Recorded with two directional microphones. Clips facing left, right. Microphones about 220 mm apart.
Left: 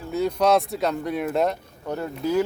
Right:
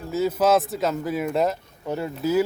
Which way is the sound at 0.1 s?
5° right (ahead or behind).